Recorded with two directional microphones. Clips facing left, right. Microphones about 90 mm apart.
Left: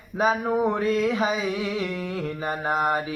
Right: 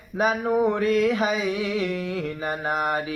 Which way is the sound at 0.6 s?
35° left (ahead or behind).